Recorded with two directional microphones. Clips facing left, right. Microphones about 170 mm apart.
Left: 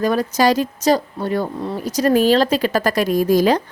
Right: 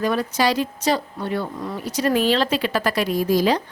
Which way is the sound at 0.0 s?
45° left (ahead or behind).